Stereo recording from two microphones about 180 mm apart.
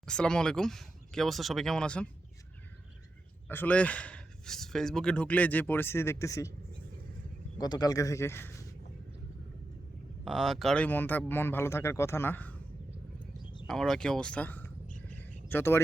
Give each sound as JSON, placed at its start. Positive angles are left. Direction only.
{"t": 0.0, "sound": "speech", "side_deg": 5}
{"t": 3.5, "sound": "speech", "side_deg": 10}
{"t": 7.6, "sound": "speech", "side_deg": 20}
{"t": 10.2, "sound": "speech", "side_deg": 0}
{"t": 13.4, "sound": "a sound", "side_deg": 25}
{"t": 13.7, "sound": "speech", "side_deg": 5}
{"t": 15.0, "sound": "a sound", "side_deg": 10}